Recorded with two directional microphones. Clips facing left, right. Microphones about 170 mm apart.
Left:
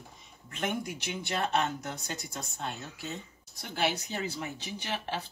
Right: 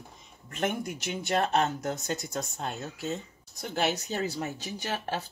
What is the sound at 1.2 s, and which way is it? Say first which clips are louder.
Speech: right 4 dB; 45° right (ahead or behind).